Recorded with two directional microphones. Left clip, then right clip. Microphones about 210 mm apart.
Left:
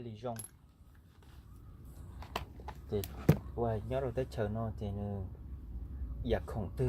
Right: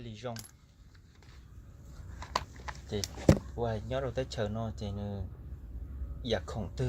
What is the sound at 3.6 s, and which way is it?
Speech, 20° left (ahead or behind).